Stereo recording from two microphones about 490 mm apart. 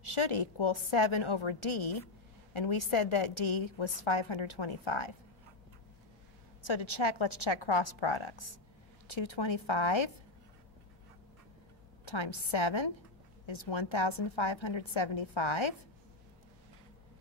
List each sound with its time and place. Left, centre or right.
0.0 s a woman's voice: left
6.6 s a woman's voice: left
12.0 s a woman's voice: left